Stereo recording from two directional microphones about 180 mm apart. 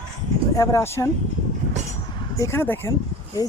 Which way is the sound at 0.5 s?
15° left (ahead or behind).